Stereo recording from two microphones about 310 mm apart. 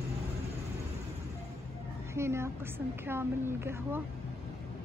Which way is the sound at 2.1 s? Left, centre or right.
Centre.